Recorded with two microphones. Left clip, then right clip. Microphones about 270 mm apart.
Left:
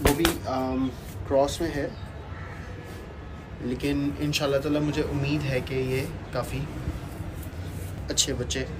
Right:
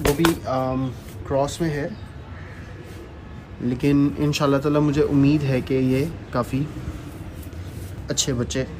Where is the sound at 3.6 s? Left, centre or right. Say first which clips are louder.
Right 7 dB; centre.